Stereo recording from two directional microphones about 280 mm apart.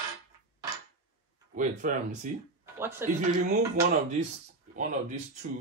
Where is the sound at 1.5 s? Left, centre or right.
Right.